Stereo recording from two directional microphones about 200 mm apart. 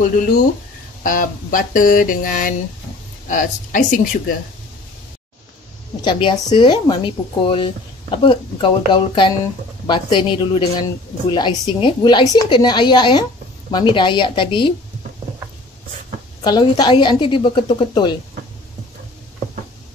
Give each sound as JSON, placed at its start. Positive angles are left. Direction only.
{"t": 1.0, "sound": "a sound", "side_deg": 45}
{"t": 3.3, "sound": "speech", "side_deg": 40}
{"t": 6.0, "sound": "speech", "side_deg": 25}
{"t": 16.4, "sound": "speech", "side_deg": 20}